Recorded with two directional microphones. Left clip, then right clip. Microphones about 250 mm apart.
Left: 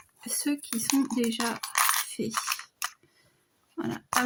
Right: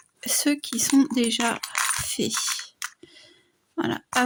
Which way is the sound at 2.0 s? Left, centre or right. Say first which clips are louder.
Right 7 dB; right.